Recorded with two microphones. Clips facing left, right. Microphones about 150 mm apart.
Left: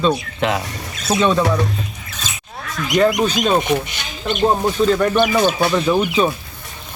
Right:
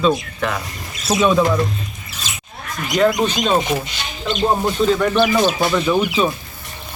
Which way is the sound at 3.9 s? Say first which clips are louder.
Even; 55° left (ahead or behind).